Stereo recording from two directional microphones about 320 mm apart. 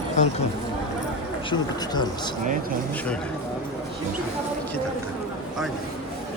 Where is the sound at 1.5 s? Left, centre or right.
Centre.